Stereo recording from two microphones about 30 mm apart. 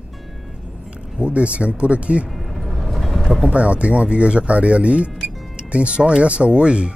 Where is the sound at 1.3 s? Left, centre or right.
Right.